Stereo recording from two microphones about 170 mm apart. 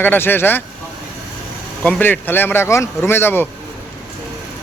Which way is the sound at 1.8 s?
10° left (ahead or behind).